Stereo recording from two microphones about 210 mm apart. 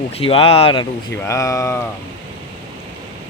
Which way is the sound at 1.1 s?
15° left (ahead or behind).